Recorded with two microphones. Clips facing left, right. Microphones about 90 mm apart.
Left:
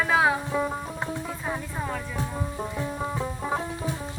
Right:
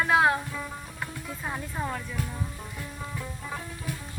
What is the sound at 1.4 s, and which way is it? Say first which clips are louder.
Music: right 1 dB; centre (ahead or behind).